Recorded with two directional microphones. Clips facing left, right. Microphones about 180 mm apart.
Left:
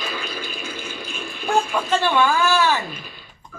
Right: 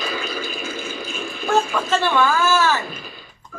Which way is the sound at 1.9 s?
15° left (ahead or behind).